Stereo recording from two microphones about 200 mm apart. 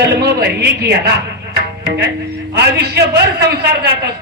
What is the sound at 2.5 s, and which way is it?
Speech, 55° right (ahead or behind).